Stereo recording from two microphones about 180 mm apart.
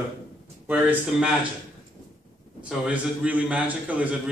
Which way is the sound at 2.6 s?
5° right (ahead or behind).